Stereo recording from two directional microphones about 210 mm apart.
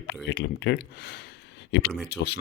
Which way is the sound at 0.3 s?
55° left (ahead or behind).